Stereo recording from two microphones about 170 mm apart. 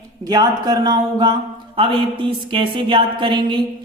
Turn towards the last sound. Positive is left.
turn(degrees=-30)  # may be behind; listen again after turning